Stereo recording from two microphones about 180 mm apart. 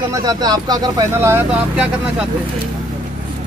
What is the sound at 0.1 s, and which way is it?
Speech, 20° right (ahead or behind).